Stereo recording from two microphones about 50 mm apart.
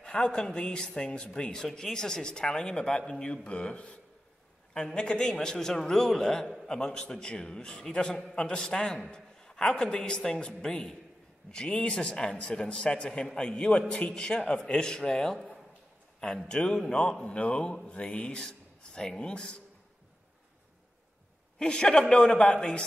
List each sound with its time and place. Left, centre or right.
0.0 s a man's voice: centre
16.4 s a man's voice: centre
21.5 s a man's voice: centre